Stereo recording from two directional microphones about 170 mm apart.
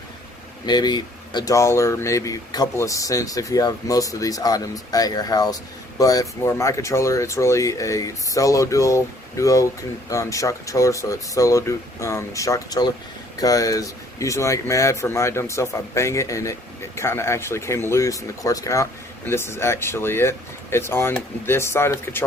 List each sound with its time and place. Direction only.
0.6 s speech: 25° left (ahead or behind)